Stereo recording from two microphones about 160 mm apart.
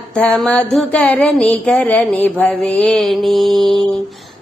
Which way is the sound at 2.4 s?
5° left (ahead or behind).